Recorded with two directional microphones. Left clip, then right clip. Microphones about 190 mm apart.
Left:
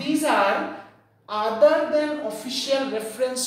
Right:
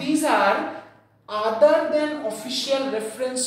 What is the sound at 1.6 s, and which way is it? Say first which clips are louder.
Speech: even; 10° left (ahead or behind).